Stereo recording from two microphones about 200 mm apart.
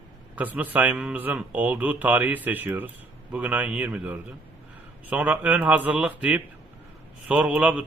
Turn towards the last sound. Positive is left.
turn(degrees=-5)  # may be behind; listen again after turning